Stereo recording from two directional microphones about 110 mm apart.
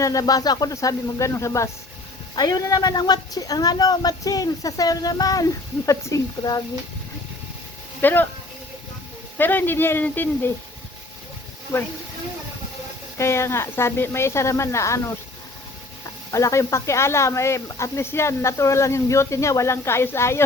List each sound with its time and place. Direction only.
0.0 s speech: 35° left (ahead or behind)
8.0 s speech: 15° left (ahead or behind)
9.4 s speech: 20° left (ahead or behind)
13.1 s speech: 25° left (ahead or behind)
16.3 s speech: 30° left (ahead or behind)